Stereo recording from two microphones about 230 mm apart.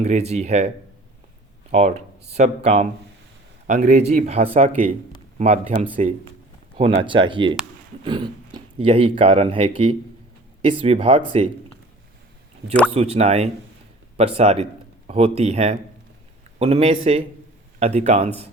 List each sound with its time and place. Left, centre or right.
0.0 s speech: right
1.7 s speech: right
12.9 s speech: right